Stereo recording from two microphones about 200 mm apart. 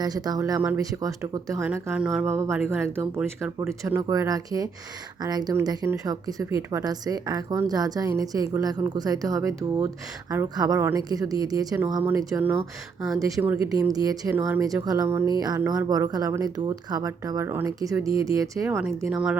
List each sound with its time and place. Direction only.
0.0 s speech: 20° right (ahead or behind)
1.6 s speech: 5° right (ahead or behind)